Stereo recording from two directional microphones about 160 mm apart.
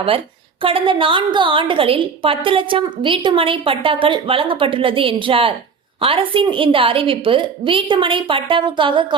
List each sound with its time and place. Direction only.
0.6 s a woman's voice: 35° right (ahead or behind)